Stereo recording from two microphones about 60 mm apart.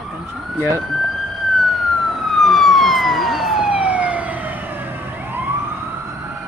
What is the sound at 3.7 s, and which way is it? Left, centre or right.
Emergency vehicle, right.